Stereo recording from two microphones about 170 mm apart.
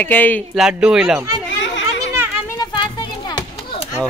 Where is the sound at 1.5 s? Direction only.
90° left.